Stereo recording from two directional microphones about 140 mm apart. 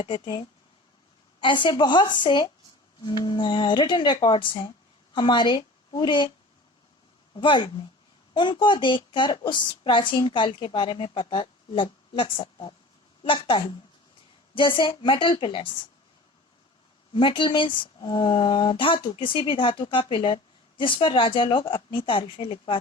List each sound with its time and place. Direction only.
0.0 s a woman's voice: 35° left (ahead or behind)
7.3 s speech: 35° left (ahead or behind)
17.2 s speech: 35° left (ahead or behind)